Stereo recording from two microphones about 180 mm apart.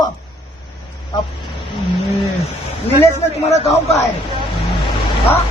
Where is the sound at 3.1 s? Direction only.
35° left (ahead or behind).